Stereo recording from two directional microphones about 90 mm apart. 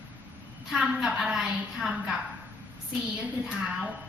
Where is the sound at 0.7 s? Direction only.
10° right (ahead or behind).